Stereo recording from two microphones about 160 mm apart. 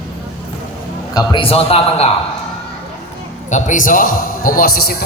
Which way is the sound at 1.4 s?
35° left (ahead or behind).